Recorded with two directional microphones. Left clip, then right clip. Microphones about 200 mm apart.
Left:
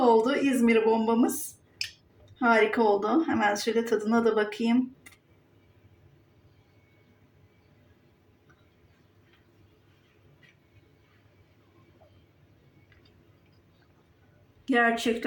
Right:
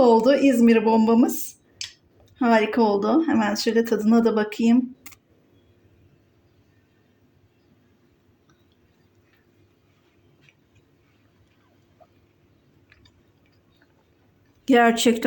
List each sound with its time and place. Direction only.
0.0 s speech: 45° right (ahead or behind)
2.4 s speech: 50° right (ahead or behind)
14.6 s speech: 50° right (ahead or behind)